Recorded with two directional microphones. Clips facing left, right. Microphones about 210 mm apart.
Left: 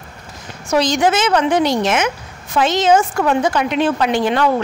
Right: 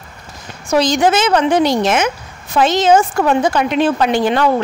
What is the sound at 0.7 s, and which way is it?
A woman's voice, 35° right (ahead or behind).